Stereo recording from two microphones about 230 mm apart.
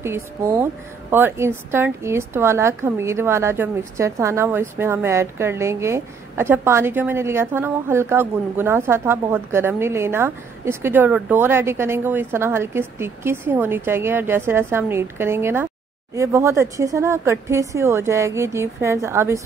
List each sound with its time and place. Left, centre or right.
0.0 s a woman's voice: centre